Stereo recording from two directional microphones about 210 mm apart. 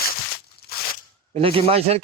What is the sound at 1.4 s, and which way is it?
Speech, 25° right (ahead or behind).